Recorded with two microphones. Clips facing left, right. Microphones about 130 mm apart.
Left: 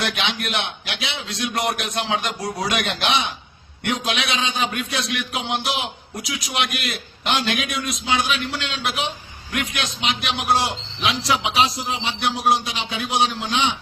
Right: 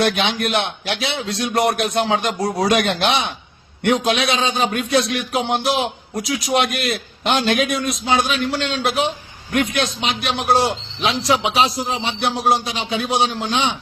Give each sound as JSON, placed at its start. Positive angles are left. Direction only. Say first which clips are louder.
{"t": 0.2, "sound": "a man's voice", "louder": "right 5 dB", "side_deg": -40}